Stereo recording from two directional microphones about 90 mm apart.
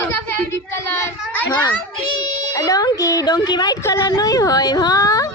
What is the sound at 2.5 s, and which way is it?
Speech, 40° left (ahead or behind).